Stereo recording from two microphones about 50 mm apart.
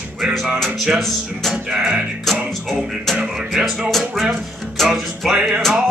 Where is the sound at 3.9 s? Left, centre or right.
Centre.